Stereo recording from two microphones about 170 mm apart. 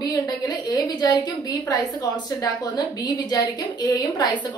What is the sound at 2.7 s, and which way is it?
A woman's voice, 25° left (ahead or behind).